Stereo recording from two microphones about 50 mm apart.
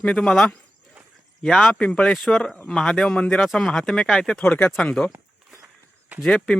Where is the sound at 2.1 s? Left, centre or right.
Centre.